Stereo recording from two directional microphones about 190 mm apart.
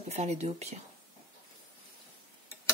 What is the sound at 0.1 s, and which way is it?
Speech, 35° right (ahead or behind).